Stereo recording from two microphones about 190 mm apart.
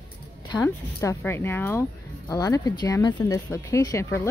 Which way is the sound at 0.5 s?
15° left (ahead or behind).